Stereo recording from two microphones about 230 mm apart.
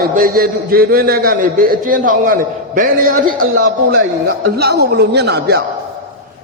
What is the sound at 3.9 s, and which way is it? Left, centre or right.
A man's voice, right.